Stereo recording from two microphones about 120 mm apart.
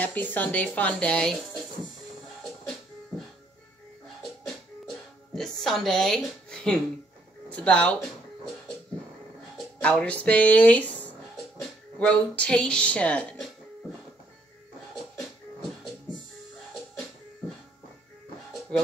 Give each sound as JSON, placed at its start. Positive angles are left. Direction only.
{"t": 0.0, "sound": "speech", "side_deg": 15}
{"t": 4.8, "sound": "music", "side_deg": 5}
{"t": 7.4, "sound": "speech", "side_deg": 10}
{"t": 9.8, "sound": "speech", "side_deg": 10}